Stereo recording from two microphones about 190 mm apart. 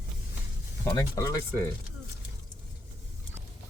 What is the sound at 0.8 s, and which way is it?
Speech, 15° left (ahead or behind).